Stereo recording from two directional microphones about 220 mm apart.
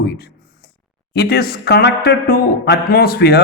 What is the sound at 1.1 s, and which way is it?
A man's voice, 45° left (ahead or behind).